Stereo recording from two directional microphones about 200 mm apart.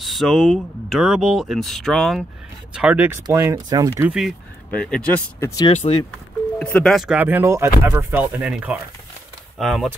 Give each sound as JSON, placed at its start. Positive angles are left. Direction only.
{"t": 0.0, "sound": "speech", "side_deg": 0}
{"t": 3.3, "sound": "speech", "side_deg": -20}
{"t": 5.7, "sound": "speech", "side_deg": 30}
{"t": 6.6, "sound": "speech", "side_deg": 5}